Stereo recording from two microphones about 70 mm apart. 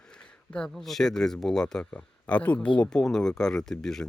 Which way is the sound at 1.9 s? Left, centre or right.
Centre.